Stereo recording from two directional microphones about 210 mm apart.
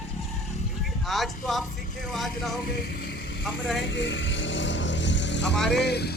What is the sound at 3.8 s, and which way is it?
Vehicle, 60° left (ahead or behind).